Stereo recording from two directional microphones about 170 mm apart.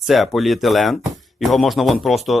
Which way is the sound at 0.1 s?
Centre (ahead or behind).